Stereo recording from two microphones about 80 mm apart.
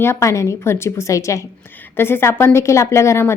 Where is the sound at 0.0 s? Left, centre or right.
Left.